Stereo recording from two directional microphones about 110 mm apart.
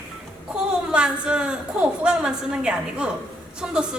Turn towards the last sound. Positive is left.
turn(degrees=-10)  # may be behind; listen again after turning